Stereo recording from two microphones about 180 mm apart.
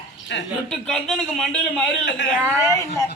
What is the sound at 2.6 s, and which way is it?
Speech, 15° left (ahead or behind).